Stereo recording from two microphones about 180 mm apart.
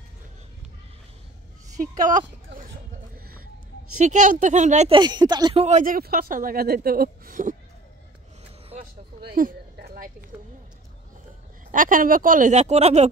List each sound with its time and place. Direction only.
1.8 s dog: 45° right (ahead or behind)
4.0 s speech: 45° right (ahead or behind)
4.9 s speech: 25° right (ahead or behind); by 7.5 s 50° right (ahead or behind)
9.3 s a sound: 55° right (ahead or behind)
11.7 s speech: 50° right (ahead or behind)